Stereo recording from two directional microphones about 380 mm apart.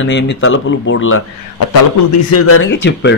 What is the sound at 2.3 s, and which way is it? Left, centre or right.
Speech, left.